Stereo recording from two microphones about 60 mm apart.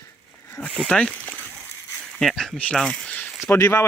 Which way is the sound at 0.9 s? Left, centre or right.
Left.